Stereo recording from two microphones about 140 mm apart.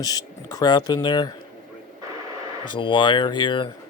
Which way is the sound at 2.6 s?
35° left (ahead or behind).